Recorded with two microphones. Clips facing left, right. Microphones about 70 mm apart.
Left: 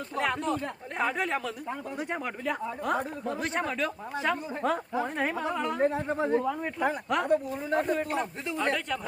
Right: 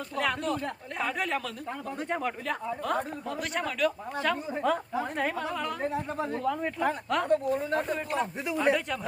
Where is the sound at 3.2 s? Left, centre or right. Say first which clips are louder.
Left 2 dB; left; by 8.3 s centre.